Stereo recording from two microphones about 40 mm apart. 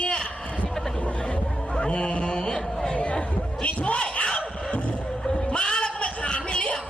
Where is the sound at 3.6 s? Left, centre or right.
Left.